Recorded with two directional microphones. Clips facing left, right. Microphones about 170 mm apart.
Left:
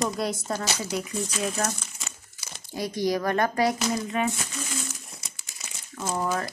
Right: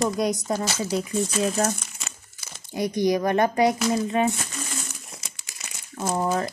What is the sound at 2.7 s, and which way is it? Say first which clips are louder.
Speech: right 4 dB; 20° right (ahead or behind).